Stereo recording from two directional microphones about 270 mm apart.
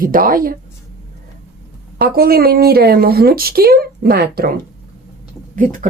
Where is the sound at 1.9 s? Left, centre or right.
Right.